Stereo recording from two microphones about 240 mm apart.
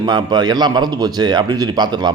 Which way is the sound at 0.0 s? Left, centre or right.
Centre.